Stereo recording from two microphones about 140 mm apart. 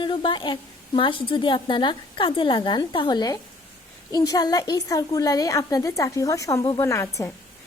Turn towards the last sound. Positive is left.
turn(degrees=20)  # may be behind; listen again after turning